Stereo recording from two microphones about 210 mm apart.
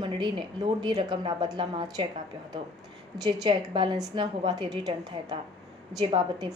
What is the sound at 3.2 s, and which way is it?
A woman's voice, 20° right (ahead or behind).